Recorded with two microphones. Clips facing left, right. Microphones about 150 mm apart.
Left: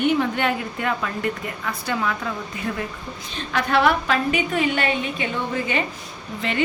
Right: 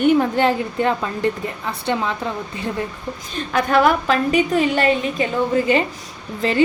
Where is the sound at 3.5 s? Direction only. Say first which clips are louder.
Right 3 dB; 45° right (ahead or behind).